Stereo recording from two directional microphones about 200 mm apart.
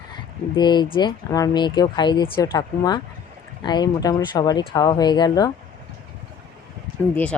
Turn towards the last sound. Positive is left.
turn(degrees=5)  # may be behind; listen again after turning